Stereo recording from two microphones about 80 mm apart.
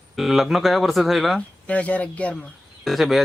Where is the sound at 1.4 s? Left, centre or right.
Centre.